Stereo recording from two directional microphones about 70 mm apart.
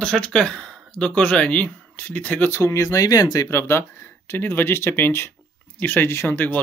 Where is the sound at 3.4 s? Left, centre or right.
Left.